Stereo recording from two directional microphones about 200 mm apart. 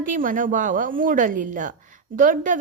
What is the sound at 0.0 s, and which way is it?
A woman's voice, 45° right (ahead or behind).